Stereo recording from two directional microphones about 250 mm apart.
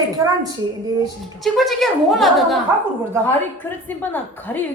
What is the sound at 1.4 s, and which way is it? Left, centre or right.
A woman's voice, centre.